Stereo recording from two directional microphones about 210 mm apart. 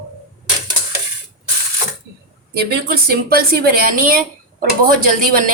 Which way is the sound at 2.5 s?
45° right (ahead or behind).